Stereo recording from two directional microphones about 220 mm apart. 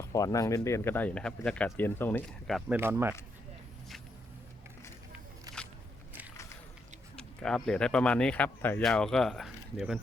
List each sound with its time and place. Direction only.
0.0 s speech: 15° left (ahead or behind)
2.7 s speech: 10° right (ahead or behind)
5.5 s a sound: 15° right (ahead or behind)
7.2 s speech: 5° left (ahead or behind)